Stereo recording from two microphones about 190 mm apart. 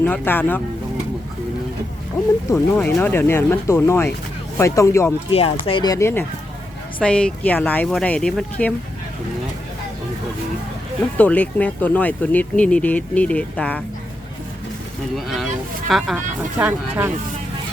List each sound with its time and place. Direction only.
0.0 s speech: 10° left (ahead or behind)
2.7 s speech: 10° left (ahead or behind)
5.3 s speech: 30° left (ahead or behind); by 8.7 s 5° left (ahead or behind)
11.2 s speech: 10° left (ahead or behind)
15.1 s speech: centre (ahead or behind)